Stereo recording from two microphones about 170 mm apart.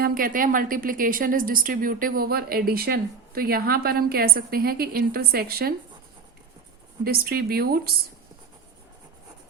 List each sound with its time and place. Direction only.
0.0 s a woman's voice: 55° right (ahead or behind)
7.0 s a woman's voice: 65° right (ahead or behind)